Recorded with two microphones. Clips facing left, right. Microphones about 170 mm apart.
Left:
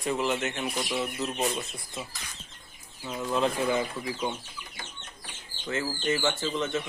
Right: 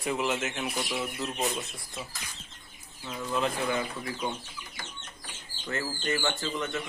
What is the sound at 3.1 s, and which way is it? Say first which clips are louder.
Speech: left 3 dB; 20° left (ahead or behind).